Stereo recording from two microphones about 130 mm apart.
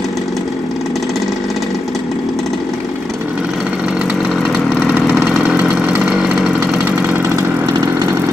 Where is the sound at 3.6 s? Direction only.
10° right (ahead or behind).